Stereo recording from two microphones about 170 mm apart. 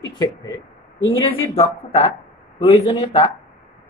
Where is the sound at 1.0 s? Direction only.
30° left (ahead or behind).